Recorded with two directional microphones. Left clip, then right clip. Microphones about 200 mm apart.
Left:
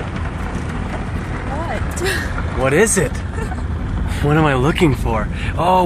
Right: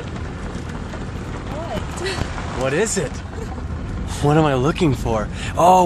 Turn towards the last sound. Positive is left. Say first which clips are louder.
# right 2 dB
turn(degrees=-25)  # may be behind; listen again after turning